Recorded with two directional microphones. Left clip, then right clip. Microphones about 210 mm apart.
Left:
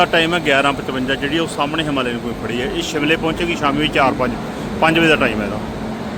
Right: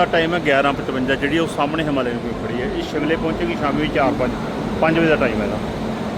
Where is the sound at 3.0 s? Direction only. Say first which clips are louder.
Left 3 dB; 15° left (ahead or behind).